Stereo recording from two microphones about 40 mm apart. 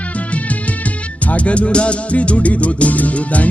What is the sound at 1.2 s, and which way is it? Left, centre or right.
Music, left.